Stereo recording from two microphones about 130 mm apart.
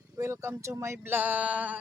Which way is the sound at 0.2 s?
20° right (ahead or behind).